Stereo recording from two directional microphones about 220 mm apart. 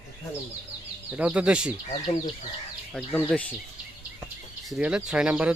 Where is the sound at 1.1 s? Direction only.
5° right (ahead or behind).